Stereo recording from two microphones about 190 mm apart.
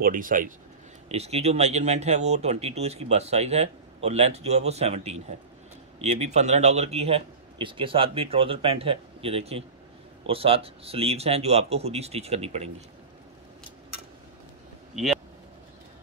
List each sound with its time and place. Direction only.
0.0 s speech: 45° right (ahead or behind)
1.0 s speech: 35° right (ahead or behind)
15.0 s speech: centre (ahead or behind)